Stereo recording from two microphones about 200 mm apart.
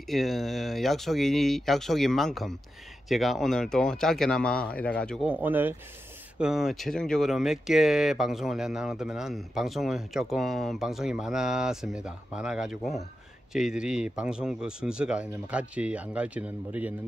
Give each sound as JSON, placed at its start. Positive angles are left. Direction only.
{"t": 0.1, "sound": "speech", "side_deg": 0}